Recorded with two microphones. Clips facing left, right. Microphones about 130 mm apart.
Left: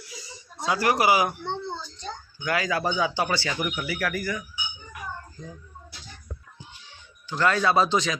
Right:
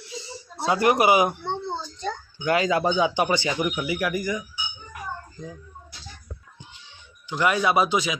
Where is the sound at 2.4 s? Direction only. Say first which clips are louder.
Right 4 dB; 25° right (ahead or behind).